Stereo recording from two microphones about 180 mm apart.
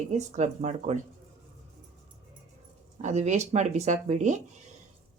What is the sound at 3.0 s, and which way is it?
Speech, 40° right (ahead or behind).